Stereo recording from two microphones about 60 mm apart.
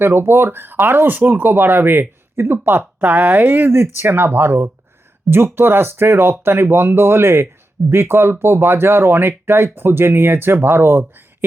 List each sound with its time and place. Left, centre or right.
0.0 s speech: right
3.7 s speech: right